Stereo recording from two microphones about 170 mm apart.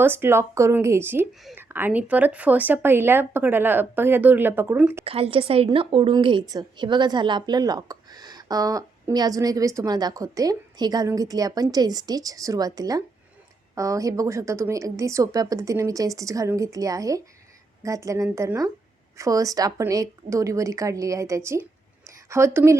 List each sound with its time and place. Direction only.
0.0 s speech: 15° right (ahead or behind)
5.0 s a woman's voice: 35° right (ahead or behind); by 22.8 s 15° right (ahead or behind)